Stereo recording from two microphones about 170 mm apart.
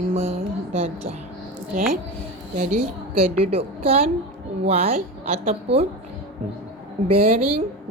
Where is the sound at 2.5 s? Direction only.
55° right (ahead or behind).